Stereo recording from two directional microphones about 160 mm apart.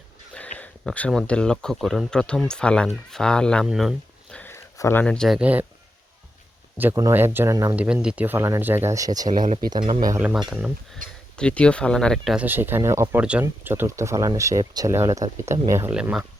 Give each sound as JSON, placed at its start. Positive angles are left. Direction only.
{"t": 0.6, "sound": "speech", "side_deg": 10}
{"t": 5.4, "sound": "speech", "side_deg": -10}
{"t": 7.1, "sound": "speech", "side_deg": -15}
{"t": 7.8, "sound": "speech", "side_deg": -5}
{"t": 9.3, "sound": "speech", "side_deg": -55}
{"t": 9.6, "sound": "speech", "side_deg": -25}
{"t": 10.0, "sound": "speech", "side_deg": -20}
{"t": 11.0, "sound": "speech", "side_deg": -55}
{"t": 11.3, "sound": "speech", "side_deg": 5}
{"t": 12.5, "sound": "speech", "side_deg": -15}
{"t": 15.9, "sound": "speech", "side_deg": -5}